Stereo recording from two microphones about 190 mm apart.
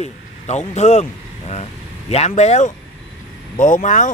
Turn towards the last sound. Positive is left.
turn(degrees=40)  # may be behind; listen again after turning